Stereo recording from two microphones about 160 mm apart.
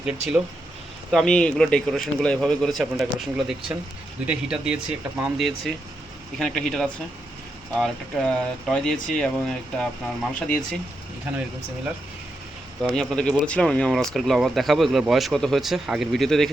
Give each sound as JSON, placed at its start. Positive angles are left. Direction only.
{"t": 0.0, "sound": "speech", "side_deg": -5}
{"t": 1.1, "sound": "speech", "side_deg": 5}
{"t": 12.8, "sound": "speech", "side_deg": 0}